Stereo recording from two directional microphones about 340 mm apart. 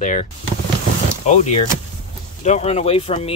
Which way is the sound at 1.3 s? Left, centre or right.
Centre.